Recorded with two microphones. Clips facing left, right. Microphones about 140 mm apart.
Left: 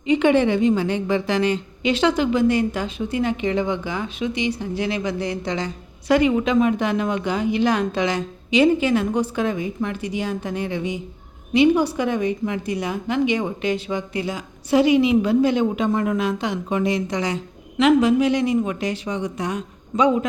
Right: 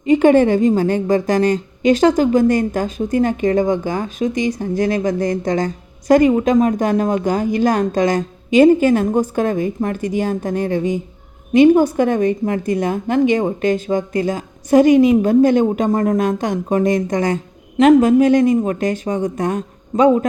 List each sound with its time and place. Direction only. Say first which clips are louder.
0.0 s a woman's voice: right 5 dB; 45° right (ahead or behind)